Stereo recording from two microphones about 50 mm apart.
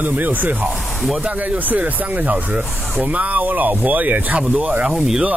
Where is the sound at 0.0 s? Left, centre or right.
Right.